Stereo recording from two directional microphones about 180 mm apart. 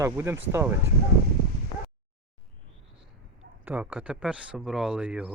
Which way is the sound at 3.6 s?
10° right (ahead or behind).